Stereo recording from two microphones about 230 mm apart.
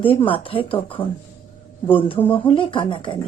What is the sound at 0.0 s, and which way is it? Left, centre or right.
A woman's voice, left.